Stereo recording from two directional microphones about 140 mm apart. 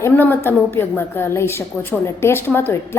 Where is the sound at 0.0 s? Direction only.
15° left (ahead or behind).